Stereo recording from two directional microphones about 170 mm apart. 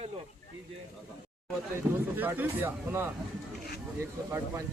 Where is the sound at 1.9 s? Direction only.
10° right (ahead or behind).